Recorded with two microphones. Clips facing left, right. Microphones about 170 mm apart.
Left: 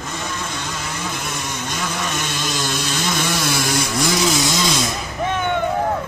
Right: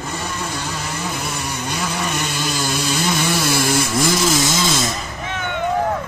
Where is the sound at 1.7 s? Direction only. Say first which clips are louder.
Right 2 dB; 10° right (ahead or behind).